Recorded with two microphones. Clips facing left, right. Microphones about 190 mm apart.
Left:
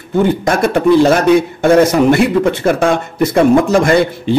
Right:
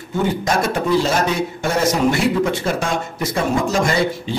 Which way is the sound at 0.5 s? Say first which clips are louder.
Left 7 dB; 60° left (ahead or behind).